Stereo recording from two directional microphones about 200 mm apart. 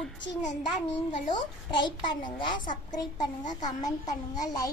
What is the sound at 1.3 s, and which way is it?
A child's voice, 20° left (ahead or behind).